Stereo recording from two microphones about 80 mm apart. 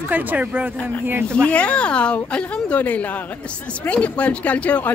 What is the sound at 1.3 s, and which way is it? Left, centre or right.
A woman's voice, centre.